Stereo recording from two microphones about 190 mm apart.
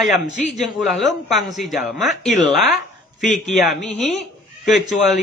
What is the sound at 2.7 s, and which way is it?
Speech, 40° left (ahead or behind).